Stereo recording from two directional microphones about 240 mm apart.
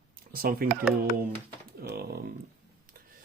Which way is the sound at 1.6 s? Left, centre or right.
Right.